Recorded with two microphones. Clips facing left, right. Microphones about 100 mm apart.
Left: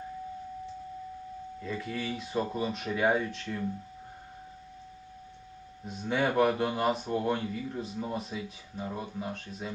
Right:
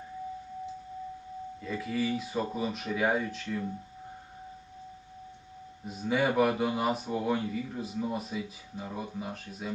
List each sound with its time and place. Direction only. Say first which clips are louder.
1.6 s speech: right 4 dB; centre (ahead or behind)
5.9 s speech: right 1 dB; 5° right (ahead or behind)